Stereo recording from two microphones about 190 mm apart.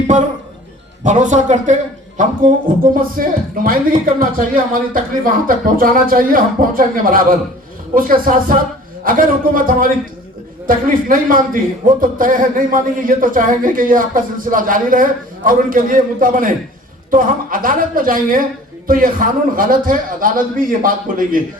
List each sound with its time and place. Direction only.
1.0 s a man's voice: 40° right (ahead or behind)